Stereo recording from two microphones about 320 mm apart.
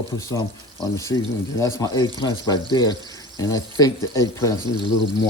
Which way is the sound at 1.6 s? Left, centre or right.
Centre.